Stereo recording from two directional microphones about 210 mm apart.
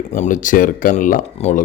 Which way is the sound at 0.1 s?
35° left (ahead or behind).